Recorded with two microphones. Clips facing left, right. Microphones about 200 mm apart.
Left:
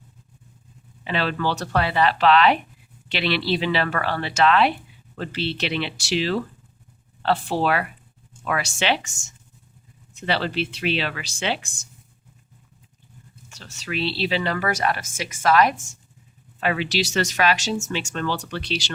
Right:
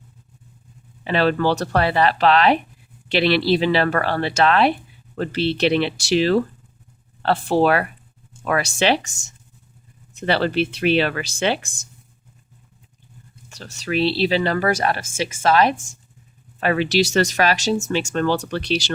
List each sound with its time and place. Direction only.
1.0 s speech: 45° right (ahead or behind)
10.2 s speech: 45° right (ahead or behind)
13.5 s speech: 35° right (ahead or behind)
16.6 s speech: 45° right (ahead or behind)